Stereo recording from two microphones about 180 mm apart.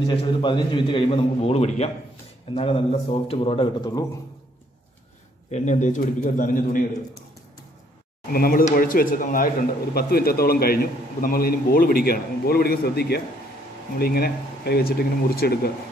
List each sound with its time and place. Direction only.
0.0 s a man's voice: 30° left (ahead or behind)
5.5 s a man's voice: 45° left (ahead or behind)
8.3 s a man's voice: 55° left (ahead or behind)